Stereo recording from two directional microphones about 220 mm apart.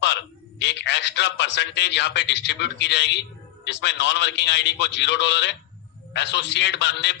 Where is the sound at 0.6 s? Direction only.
50° left (ahead or behind).